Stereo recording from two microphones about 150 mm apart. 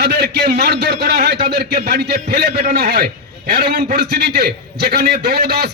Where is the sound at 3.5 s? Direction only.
75° right (ahead or behind).